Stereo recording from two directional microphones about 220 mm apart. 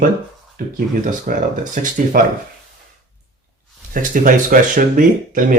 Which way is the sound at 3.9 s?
40° right (ahead or behind).